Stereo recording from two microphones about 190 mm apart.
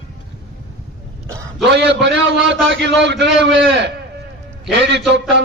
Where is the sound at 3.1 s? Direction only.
65° right (ahead or behind).